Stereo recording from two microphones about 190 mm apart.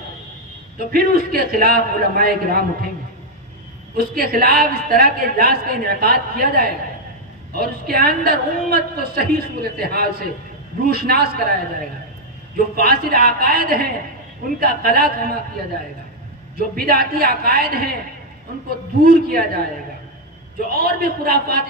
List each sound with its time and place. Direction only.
0.7 s a woman's voice: 55° right (ahead or behind)
3.9 s a woman's voice: 50° right (ahead or behind)
12.5 s a woman's voice: 55° right (ahead or behind)
16.5 s a woman's voice: 55° right (ahead or behind)
19.0 s a woman's voice: 50° right (ahead or behind)
20.7 s a woman's voice: 55° right (ahead or behind)